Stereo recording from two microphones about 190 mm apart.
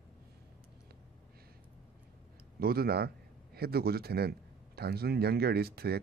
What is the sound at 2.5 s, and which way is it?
A man's voice, 55° right (ahead or behind).